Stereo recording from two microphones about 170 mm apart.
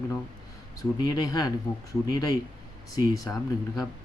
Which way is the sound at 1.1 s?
20° left (ahead or behind).